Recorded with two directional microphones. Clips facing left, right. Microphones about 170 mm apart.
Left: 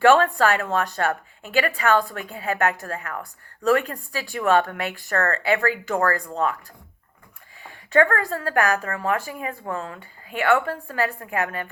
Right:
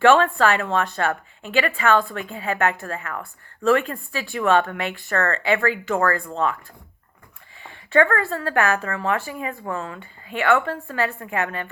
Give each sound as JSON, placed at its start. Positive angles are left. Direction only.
{"t": 0.0, "sound": "speech", "side_deg": 40}
{"t": 7.6, "sound": "speech", "side_deg": 40}